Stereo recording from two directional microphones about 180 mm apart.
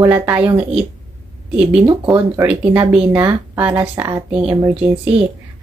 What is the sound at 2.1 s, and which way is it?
Speech, 10° right (ahead or behind).